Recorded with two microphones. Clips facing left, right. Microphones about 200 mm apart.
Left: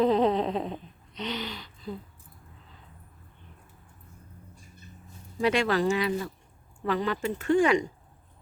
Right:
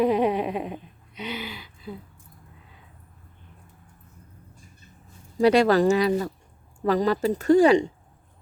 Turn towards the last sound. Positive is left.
turn(degrees=-35)  # may be behind; listen again after turning